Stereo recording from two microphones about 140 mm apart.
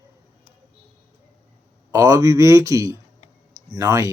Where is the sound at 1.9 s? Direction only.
25° right (ahead or behind).